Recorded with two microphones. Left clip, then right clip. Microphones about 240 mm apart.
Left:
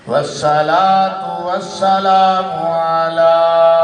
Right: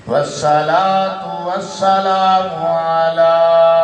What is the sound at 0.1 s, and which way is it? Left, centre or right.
Mantra, left.